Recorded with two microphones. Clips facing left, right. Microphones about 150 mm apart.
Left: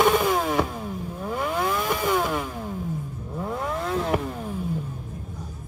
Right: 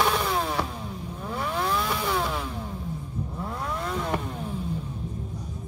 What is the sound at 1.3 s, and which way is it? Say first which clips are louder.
Vehicle: left 2 dB; 5° left (ahead or behind).